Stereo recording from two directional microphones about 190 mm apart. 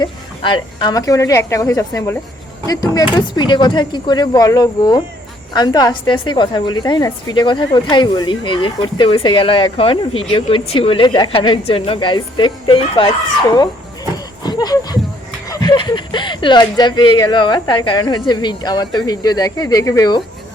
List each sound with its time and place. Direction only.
0.0 s a woman's voice: 25° left (ahead or behind)
14.4 s a sound: 20° left (ahead or behind)
15.4 s a woman's voice: 20° left (ahead or behind)